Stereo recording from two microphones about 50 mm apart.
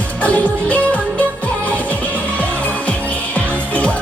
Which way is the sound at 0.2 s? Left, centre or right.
Left.